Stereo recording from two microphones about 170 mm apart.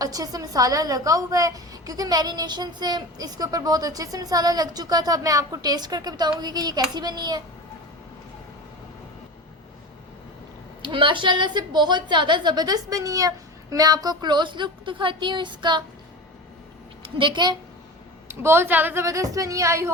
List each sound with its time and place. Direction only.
0.0 s a woman's voice: 20° right (ahead or behind)
10.8 s a woman's voice: 30° right (ahead or behind)
17.0 s a woman's voice: 30° right (ahead or behind)
18.4 s a woman's voice: 15° right (ahead or behind)